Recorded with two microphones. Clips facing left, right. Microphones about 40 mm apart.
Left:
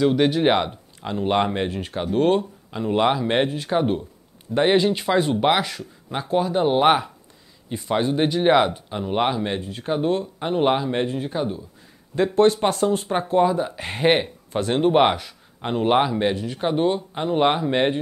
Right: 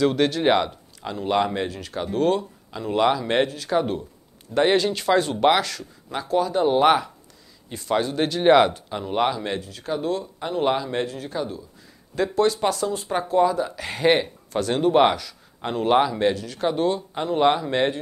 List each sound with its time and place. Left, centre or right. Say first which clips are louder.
0.0 s speech: left 2 dB; centre; by 2.8 s left
2.8 s speech: left 1 dB; left
4.6 s speech: left 1 dB; centre; by 13.1 s left
13.1 s speech: right 2 dB; left